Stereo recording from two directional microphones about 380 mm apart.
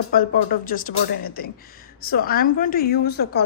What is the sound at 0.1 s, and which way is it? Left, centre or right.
A woman's voice, left.